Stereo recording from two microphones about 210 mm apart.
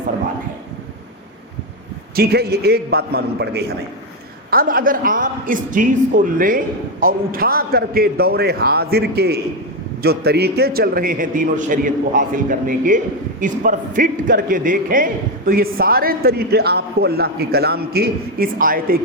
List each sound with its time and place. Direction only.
2.1 s a man's voice: 50° right (ahead or behind)